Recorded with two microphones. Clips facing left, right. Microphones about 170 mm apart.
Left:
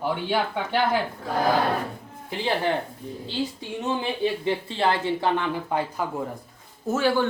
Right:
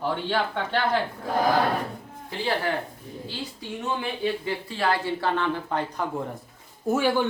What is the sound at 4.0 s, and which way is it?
Speech, 25° left (ahead or behind).